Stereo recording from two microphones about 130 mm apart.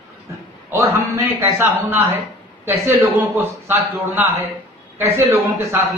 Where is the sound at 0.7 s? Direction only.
20° right (ahead or behind).